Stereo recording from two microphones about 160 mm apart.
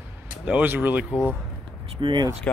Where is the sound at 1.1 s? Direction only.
5° left (ahead or behind).